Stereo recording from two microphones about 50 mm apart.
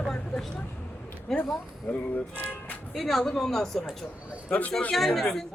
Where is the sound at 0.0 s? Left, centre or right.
Centre.